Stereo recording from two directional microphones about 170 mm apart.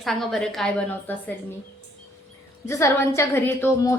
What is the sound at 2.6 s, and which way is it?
A woman's voice, 15° left (ahead or behind).